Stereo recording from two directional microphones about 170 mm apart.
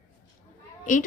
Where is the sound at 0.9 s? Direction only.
45° left (ahead or behind).